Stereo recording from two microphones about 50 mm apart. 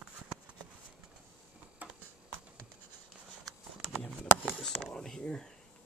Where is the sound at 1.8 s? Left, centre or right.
Right.